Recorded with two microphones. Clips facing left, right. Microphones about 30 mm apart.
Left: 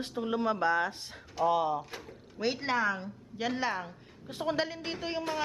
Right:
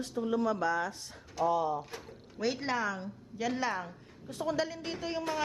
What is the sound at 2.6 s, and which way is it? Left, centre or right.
A woman's voice, left.